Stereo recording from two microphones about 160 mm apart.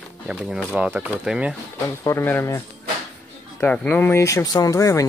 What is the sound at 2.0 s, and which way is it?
Speech, 15° left (ahead or behind).